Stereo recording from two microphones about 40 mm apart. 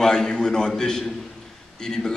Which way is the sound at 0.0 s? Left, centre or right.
Centre.